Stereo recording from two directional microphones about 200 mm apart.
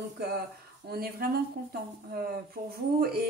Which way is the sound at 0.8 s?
50° right (ahead or behind).